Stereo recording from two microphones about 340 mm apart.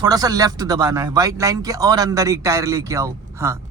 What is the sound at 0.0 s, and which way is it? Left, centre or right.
Speech, centre.